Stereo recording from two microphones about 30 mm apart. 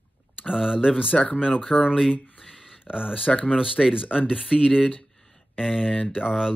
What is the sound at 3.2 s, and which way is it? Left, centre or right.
Speech, left.